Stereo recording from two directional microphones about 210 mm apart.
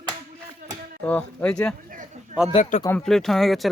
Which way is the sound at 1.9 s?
40° right (ahead or behind).